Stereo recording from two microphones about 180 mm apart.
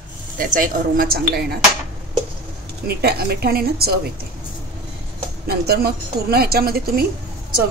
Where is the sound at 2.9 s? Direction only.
60° right (ahead or behind).